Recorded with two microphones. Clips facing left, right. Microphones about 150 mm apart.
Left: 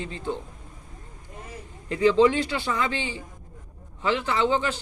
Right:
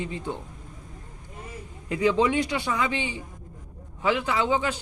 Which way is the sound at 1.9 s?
15° right (ahead or behind).